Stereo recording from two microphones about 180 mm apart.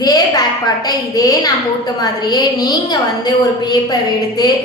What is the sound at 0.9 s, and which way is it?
A woman's voice, 20° left (ahead or behind).